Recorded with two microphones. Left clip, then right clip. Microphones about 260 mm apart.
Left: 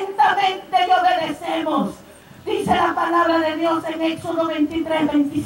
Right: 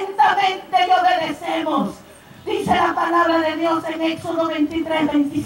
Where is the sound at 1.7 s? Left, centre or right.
Left.